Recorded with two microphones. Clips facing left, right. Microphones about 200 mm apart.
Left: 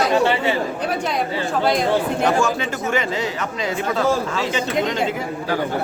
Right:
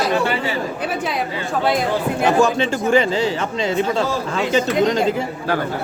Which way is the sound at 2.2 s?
30° right (ahead or behind).